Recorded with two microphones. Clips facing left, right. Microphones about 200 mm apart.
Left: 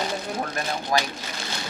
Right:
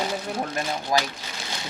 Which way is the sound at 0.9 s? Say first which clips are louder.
Even; 15° right (ahead or behind).